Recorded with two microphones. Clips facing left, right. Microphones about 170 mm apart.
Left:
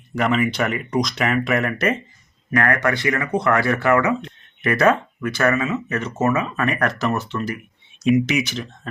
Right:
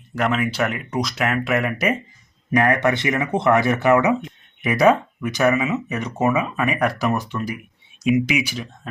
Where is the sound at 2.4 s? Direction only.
20° right (ahead or behind).